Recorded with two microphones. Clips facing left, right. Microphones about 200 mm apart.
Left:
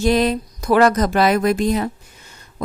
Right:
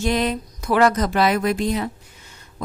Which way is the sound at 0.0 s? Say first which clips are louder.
Left 5 dB; 35° left (ahead or behind).